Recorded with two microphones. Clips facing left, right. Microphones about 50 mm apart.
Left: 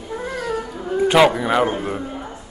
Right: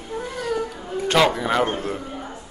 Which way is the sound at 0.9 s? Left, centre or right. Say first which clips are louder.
Left 5 dB; centre.